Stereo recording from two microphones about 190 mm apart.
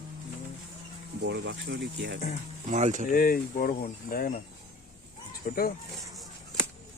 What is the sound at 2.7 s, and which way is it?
Speech, 40° right (ahead or behind).